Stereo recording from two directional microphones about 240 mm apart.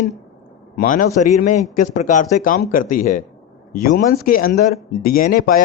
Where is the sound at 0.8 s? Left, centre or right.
Left.